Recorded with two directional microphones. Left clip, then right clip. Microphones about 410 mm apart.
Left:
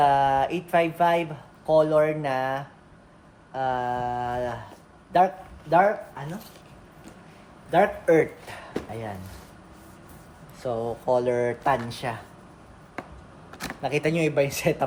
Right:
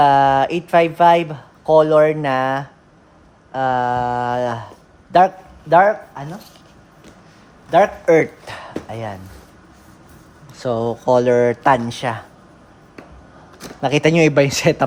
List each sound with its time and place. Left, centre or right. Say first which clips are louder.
0.0 s speech: right 8 dB; right
7.7 s speech: right 7 dB; centre
10.6 s speech: right 8 dB; right
13.8 s speech: right 10 dB; centre